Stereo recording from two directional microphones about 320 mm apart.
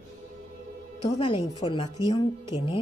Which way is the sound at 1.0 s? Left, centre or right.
Centre.